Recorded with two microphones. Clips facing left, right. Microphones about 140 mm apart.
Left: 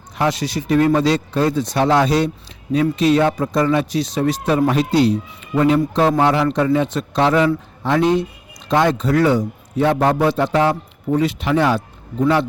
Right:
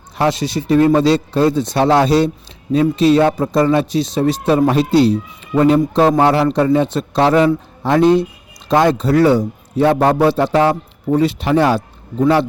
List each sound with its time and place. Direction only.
0.2 s a man's voice: 25° right (ahead or behind)